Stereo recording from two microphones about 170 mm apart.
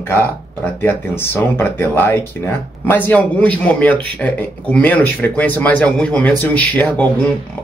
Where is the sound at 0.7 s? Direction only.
10° left (ahead or behind).